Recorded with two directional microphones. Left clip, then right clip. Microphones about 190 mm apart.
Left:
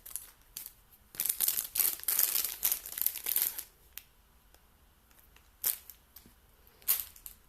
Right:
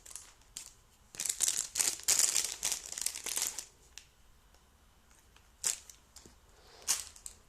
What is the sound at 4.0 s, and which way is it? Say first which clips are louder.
Finger snapping: even; 15° left (ahead or behind).